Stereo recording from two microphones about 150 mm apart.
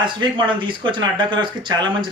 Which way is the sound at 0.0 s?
30° right (ahead or behind).